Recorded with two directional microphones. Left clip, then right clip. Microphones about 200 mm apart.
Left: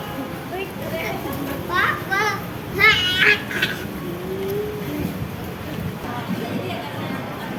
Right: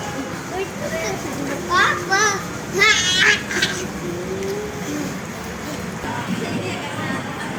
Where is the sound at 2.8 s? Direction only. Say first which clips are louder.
Even; 50° right (ahead or behind).